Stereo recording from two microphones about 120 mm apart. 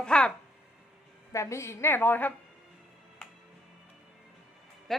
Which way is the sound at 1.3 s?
25° left (ahead or behind).